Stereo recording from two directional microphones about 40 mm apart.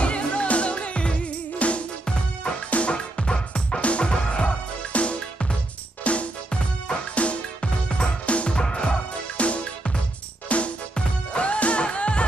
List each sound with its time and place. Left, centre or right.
0.0 s music: left
11.0 s music: left